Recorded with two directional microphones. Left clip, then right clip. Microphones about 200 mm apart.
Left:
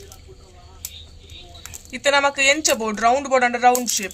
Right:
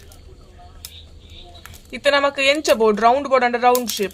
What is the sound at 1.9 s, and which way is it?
Speech, 40° right (ahead or behind).